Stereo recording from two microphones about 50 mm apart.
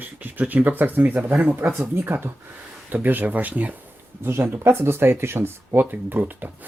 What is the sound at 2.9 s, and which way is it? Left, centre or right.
Speech, right.